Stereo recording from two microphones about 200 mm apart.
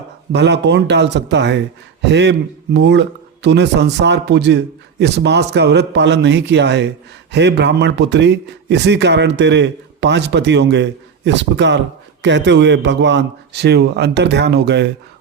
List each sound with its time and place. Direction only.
0.3 s speech: 60° right (ahead or behind)